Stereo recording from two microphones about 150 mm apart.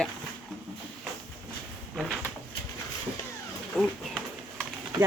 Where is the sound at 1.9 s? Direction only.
5° right (ahead or behind).